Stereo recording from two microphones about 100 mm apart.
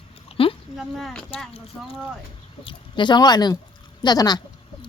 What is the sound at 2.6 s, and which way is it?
Speech, 50° left (ahead or behind).